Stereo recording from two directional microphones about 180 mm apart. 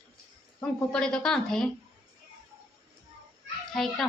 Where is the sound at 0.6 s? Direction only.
5° left (ahead or behind).